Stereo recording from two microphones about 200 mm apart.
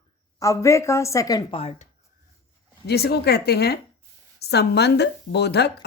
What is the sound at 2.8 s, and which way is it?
A woman's voice, 55° left (ahead or behind).